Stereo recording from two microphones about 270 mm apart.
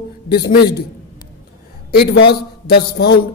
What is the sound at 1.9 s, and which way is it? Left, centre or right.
Speech, left.